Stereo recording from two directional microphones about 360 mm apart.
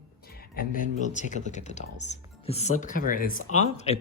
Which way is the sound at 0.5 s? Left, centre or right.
Left.